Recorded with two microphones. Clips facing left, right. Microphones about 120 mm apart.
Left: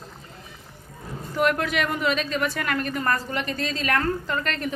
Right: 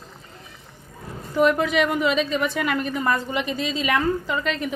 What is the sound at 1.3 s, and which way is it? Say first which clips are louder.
A woman's voice: right 4 dB; centre (ahead or behind).